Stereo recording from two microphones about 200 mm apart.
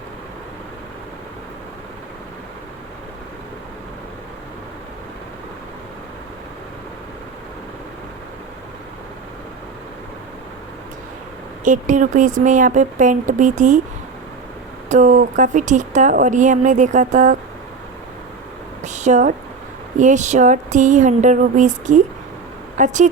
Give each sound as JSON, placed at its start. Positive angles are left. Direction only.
{"t": 11.6, "sound": "speech", "side_deg": -40}
{"t": 14.8, "sound": "speech", "side_deg": -35}
{"t": 18.8, "sound": "a sound", "side_deg": -35}
{"t": 20.0, "sound": "speech", "side_deg": -40}